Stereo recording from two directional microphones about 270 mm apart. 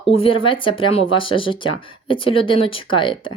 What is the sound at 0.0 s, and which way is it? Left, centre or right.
Speech, centre.